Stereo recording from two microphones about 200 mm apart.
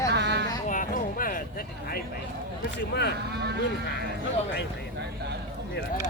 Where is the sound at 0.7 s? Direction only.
40° left (ahead or behind).